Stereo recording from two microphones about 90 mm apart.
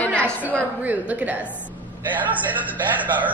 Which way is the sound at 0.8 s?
15° right (ahead or behind).